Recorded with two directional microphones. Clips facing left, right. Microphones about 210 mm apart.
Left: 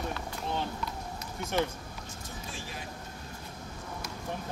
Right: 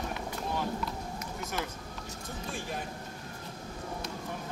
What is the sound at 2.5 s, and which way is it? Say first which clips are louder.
Vehicle: right 7 dB; 55° right (ahead or behind).